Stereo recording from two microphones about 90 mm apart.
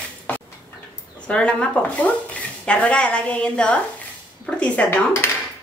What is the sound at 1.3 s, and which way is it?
Speech, 10° left (ahead or behind).